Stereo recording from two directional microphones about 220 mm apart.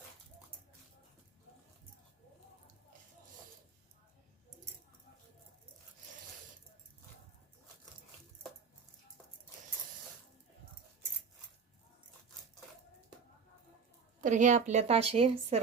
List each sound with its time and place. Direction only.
14.2 s a woman's voice: 35° right (ahead or behind)